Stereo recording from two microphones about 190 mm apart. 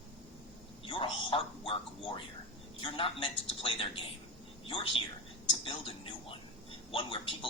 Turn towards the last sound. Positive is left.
turn(degrees=30)  # may be behind; listen again after turning